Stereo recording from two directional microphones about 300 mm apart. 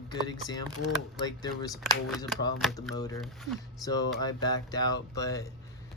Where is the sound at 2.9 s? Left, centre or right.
Centre.